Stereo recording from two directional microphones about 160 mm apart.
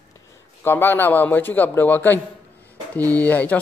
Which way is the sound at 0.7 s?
15° left (ahead or behind).